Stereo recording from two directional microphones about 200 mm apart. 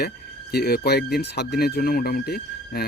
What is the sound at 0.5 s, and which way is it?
Speech, 50° left (ahead or behind).